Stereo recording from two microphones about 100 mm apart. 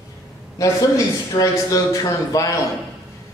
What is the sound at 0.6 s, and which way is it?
A man's voice, 30° left (ahead or behind).